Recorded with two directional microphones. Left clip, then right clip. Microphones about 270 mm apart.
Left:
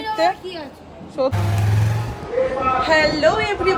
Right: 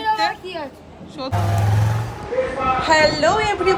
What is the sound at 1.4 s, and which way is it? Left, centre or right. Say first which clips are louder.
Speech: right 3 dB; centre.